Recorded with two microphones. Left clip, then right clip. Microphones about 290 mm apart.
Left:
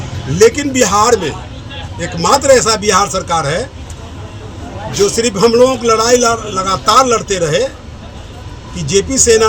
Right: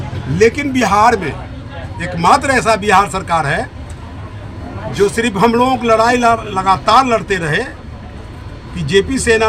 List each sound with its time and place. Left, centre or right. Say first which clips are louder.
0.3 s a man's voice: left 3 dB; centre
5.1 s a man's voice: left 6 dB; centre
8.9 s a man's voice: left 2 dB; centre